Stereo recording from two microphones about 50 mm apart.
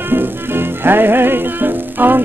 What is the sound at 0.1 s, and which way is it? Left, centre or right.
Music, right.